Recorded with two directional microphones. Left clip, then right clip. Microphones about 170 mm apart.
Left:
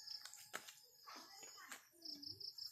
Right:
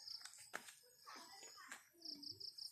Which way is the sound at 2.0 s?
45° right (ahead or behind).